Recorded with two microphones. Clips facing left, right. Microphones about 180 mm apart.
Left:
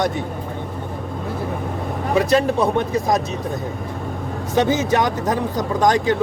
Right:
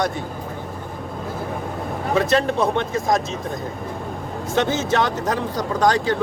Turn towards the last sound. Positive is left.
turn(degrees=15)  # may be behind; listen again after turning